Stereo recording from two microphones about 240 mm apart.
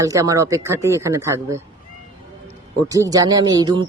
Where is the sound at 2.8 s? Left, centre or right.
Centre.